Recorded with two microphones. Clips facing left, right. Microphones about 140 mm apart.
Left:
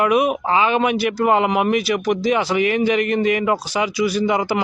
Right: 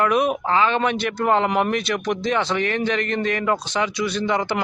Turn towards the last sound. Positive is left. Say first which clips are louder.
# left 3 dB
turn(degrees=10)  # may be behind; listen again after turning